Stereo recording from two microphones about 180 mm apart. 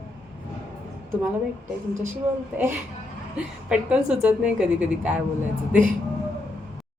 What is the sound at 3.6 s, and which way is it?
A woman's voice, 5° right (ahead or behind).